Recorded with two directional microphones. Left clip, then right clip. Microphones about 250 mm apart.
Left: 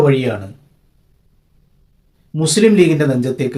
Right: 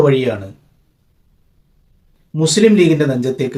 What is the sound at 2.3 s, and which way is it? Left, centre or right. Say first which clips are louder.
Speech: even; centre.